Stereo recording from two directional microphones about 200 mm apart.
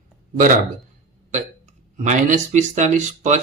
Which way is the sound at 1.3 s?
35° right (ahead or behind).